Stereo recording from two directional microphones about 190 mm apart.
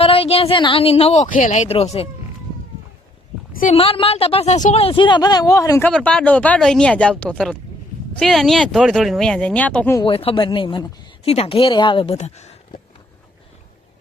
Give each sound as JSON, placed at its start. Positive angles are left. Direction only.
{"t": 0.0, "sound": "speech", "side_deg": 30}
{"t": 3.5, "sound": "speech", "side_deg": 45}
{"t": 3.8, "sound": "speech", "side_deg": 30}
{"t": 5.9, "sound": "speech", "side_deg": 5}
{"t": 10.0, "sound": "speech", "side_deg": 30}